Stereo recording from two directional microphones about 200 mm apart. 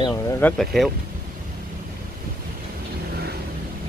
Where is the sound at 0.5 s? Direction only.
Centre (ahead or behind).